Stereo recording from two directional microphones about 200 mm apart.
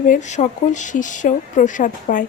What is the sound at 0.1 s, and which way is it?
A woman's voice, 35° left (ahead or behind).